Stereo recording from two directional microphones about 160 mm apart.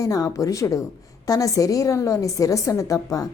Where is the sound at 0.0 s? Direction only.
20° left (ahead or behind).